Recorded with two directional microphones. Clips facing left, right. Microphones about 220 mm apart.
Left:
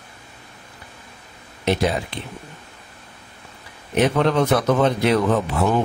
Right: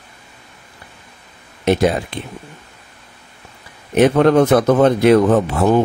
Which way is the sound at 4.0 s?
50° right (ahead or behind).